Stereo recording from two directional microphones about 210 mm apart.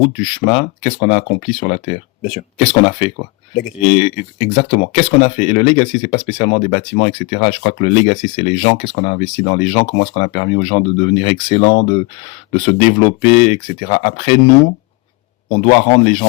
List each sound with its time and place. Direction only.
0.0 s speech: 30° left (ahead or behind)